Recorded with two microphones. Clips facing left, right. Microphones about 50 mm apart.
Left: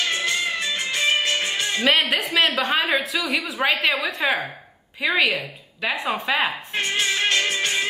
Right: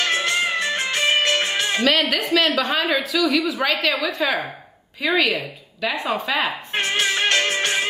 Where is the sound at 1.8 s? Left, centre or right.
Left.